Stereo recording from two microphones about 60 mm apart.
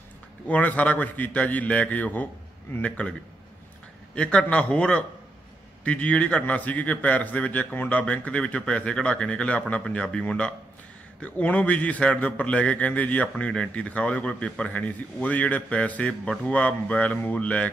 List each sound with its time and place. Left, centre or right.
0.5 s a man's voice: left